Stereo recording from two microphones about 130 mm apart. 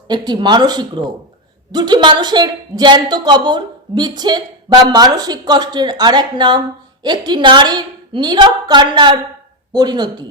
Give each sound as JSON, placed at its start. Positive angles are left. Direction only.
{"t": 0.1, "sound": "speech", "side_deg": -35}